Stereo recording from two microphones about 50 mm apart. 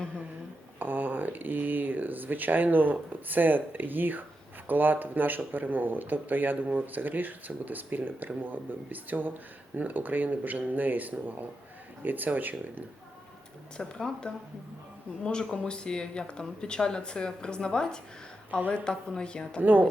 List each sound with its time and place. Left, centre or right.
0.8 s speech: right
13.7 s speech: centre
19.6 s speech: right